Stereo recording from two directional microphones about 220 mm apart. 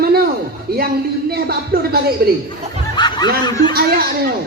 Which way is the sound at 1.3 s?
45° right (ahead or behind).